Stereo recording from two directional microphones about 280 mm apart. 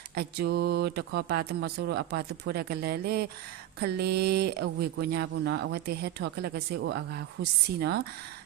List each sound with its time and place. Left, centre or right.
0.2 s speech: right